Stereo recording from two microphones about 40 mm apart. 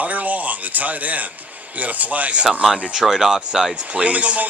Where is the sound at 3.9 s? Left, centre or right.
Right.